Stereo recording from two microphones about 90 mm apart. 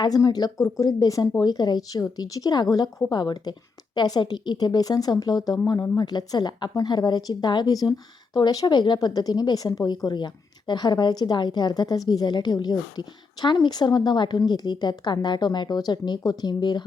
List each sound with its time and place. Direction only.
0.0 s a woman's voice: 45° left (ahead or behind)